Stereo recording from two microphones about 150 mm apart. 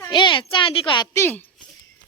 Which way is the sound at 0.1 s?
30° left (ahead or behind).